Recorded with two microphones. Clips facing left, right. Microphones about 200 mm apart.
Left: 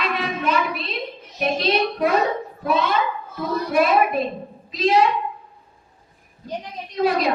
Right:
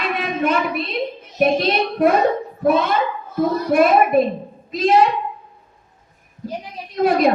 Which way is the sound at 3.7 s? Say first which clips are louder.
Right 3 dB; 50° right (ahead or behind).